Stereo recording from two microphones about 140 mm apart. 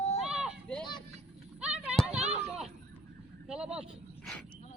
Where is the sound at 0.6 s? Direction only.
5° left (ahead or behind).